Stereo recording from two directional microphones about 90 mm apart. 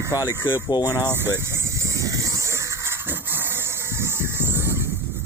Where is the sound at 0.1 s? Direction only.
40° left (ahead or behind).